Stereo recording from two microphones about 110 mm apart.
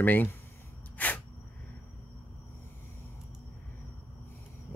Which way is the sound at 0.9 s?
15° left (ahead or behind).